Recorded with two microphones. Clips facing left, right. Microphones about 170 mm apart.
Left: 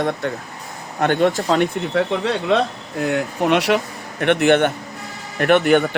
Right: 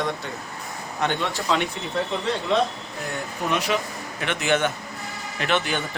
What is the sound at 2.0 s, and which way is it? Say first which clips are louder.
Speech: left 5 dB; 70° left (ahead or behind).